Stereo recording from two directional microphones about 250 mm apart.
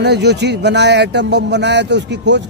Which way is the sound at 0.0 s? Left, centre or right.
Right.